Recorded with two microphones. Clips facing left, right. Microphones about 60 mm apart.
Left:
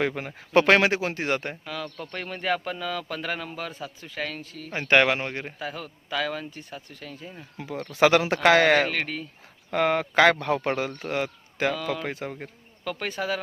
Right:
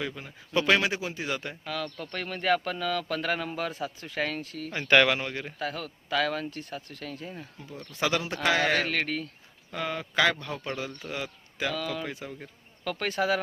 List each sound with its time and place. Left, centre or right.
0.0 s speech: left
1.6 s a man's voice: centre
4.7 s speech: left
5.5 s a man's voice: centre
7.6 s speech: left
8.4 s speech: left
8.8 s a man's voice: centre
9.7 s speech: left
12.8 s a man's voice: centre